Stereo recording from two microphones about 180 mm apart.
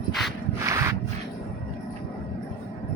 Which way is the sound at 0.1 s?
Centre (ahead or behind).